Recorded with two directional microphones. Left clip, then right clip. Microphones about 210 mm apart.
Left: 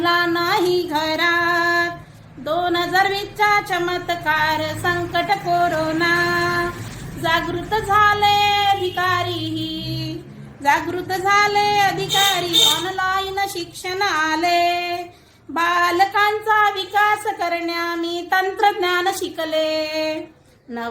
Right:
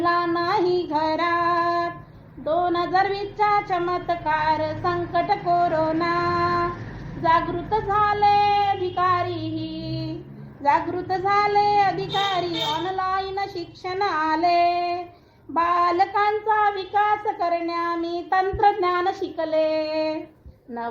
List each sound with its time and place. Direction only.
0.0 s female singing: 5° left (ahead or behind)
2.6 s a sound: 5° left (ahead or behind)
7.9 s a sound: 5° left (ahead or behind)
8.5 s child singing: 5° left (ahead or behind)
12.5 s a woman's voice: 20° left (ahead or behind)
12.8 s child singing: 5° left (ahead or behind)